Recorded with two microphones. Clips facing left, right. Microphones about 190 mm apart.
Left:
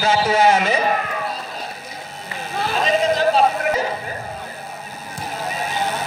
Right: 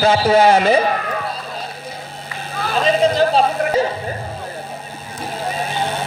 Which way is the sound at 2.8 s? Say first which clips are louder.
Right 3 dB; 30° right (ahead or behind).